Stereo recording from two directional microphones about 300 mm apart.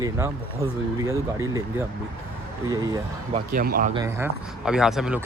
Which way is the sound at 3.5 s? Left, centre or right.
Right.